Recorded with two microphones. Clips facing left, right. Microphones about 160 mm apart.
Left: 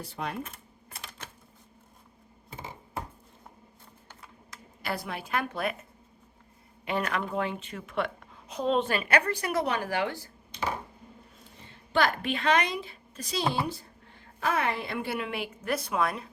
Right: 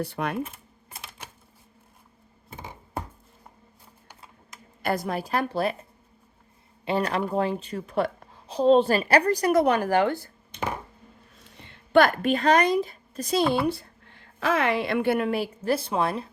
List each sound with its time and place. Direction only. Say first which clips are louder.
0.0 s speech: right 7 dB; 65° right (ahead or behind)
4.8 s a woman's voice: right 7 dB; 45° right (ahead or behind)
6.8 s a woman's voice: right 5 dB; 30° right (ahead or behind); by 10.7 s 50° right (ahead or behind)
11.4 s a woman's voice: right 1 dB; 75° right (ahead or behind)
14.3 s a woman's voice: right 5 dB; 90° right; by 16.3 s 30° right (ahead or behind)